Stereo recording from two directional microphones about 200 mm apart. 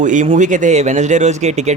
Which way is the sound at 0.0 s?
40° right (ahead or behind).